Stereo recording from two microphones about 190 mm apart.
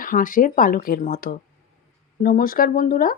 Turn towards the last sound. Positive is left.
turn(degrees=45)  # may be behind; listen again after turning